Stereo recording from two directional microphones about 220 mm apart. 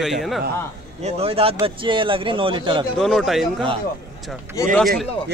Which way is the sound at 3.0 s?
Centre (ahead or behind).